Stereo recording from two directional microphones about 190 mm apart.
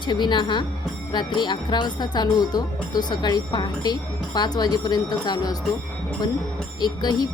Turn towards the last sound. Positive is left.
turn(degrees=20)  # may be behind; listen again after turning